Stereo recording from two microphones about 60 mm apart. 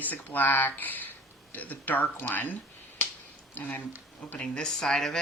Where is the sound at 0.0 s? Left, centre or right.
Left.